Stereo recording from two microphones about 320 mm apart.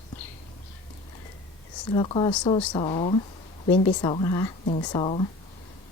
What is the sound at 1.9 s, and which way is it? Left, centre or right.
Speech, centre.